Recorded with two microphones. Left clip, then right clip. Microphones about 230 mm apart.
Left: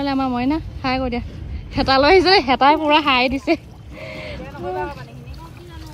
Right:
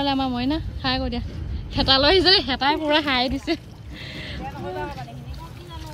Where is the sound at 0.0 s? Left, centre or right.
Centre.